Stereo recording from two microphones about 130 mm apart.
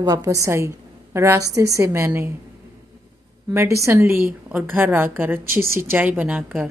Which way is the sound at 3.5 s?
25° right (ahead or behind).